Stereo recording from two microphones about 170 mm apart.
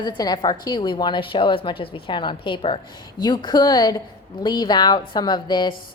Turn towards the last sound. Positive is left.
turn(degrees=25)  # may be behind; listen again after turning